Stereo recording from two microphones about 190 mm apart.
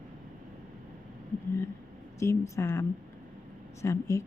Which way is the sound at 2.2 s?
15° left (ahead or behind).